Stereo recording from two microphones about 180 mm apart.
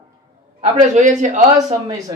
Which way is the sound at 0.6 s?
40° right (ahead or behind).